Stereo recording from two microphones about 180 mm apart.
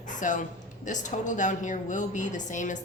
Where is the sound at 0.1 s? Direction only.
45° left (ahead or behind).